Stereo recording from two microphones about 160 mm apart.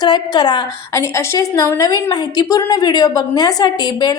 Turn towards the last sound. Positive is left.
turn(degrees=25)  # may be behind; listen again after turning